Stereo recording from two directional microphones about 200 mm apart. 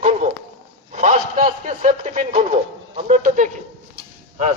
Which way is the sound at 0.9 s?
35° right (ahead or behind).